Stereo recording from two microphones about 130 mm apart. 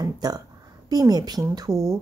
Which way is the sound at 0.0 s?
30° right (ahead or behind).